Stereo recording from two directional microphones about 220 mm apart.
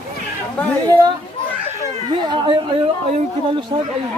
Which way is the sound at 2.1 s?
20° right (ahead or behind).